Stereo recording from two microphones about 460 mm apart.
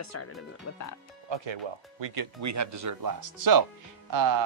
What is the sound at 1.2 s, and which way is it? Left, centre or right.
Speech, right.